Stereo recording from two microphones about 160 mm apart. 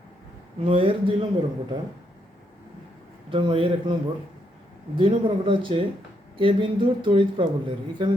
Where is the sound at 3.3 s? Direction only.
35° right (ahead or behind).